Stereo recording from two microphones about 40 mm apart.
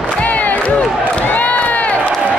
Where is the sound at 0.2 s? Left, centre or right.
Left.